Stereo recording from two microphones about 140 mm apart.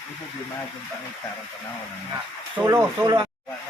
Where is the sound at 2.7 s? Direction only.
20° right (ahead or behind).